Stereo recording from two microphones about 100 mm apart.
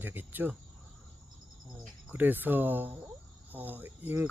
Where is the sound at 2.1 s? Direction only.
20° right (ahead or behind).